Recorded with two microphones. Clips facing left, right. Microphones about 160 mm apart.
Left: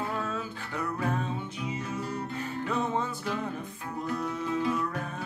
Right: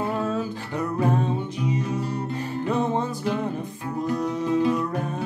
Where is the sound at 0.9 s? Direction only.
30° right (ahead or behind).